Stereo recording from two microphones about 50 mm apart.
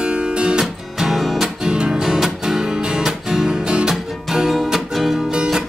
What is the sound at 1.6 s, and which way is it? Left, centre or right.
Music, centre.